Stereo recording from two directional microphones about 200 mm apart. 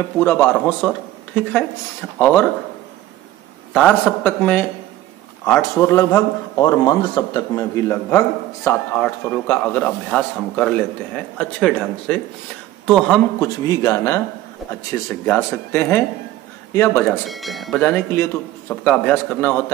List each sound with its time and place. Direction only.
0.2 s a man's voice: 10° left (ahead or behind)
3.7 s a man's voice: 5° left (ahead or behind)
13.4 s a man's voice: 15° left (ahead or behind)
17.3 s a man's voice: centre (ahead or behind)